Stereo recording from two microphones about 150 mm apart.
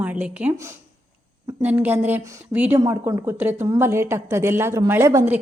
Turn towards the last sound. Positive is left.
turn(degrees=-15)  # may be behind; listen again after turning